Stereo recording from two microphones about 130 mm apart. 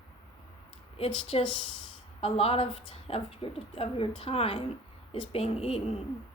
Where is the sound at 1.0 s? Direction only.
50° left (ahead or behind).